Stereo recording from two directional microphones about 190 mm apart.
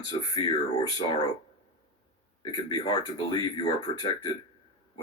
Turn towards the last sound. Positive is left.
turn(degrees=20)  # may be behind; listen again after turning